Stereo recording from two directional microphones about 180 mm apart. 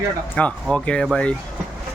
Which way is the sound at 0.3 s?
5° left (ahead or behind).